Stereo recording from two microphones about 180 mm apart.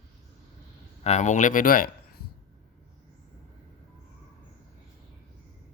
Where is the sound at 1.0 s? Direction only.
40° left (ahead or behind).